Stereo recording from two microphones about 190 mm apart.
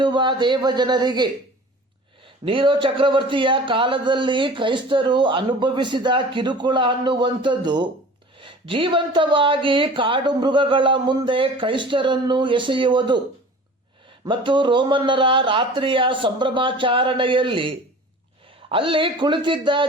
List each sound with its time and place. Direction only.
0.0 s speech: 25° right (ahead or behind)
2.4 s speech: 25° right (ahead or behind)
14.3 s speech: 25° right (ahead or behind)